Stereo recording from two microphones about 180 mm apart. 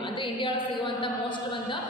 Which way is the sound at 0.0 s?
25° left (ahead or behind).